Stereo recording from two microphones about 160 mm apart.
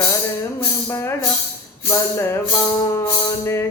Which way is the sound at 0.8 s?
15° left (ahead or behind).